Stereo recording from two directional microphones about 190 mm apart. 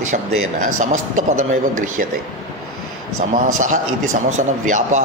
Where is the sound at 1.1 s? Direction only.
40° right (ahead or behind).